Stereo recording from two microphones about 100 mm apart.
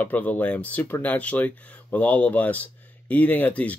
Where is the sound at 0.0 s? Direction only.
15° left (ahead or behind).